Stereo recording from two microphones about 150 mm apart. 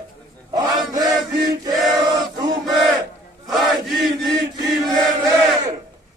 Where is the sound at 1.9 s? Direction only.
25° right (ahead or behind).